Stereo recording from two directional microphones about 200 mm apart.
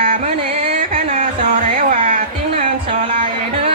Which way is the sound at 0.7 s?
35° right (ahead or behind).